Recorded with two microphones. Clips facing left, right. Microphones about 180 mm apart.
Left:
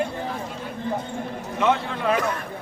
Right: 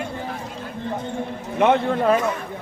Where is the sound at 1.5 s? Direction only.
60° right (ahead or behind).